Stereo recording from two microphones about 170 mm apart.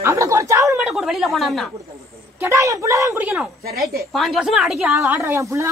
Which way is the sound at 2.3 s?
15° right (ahead or behind).